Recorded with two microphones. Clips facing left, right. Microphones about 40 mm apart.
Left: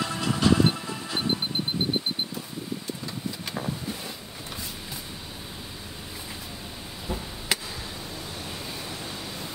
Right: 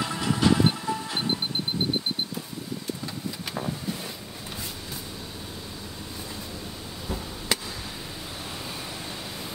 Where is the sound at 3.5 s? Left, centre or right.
Centre.